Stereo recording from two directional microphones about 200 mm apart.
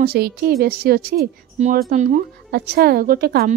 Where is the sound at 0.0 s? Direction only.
50° right (ahead or behind).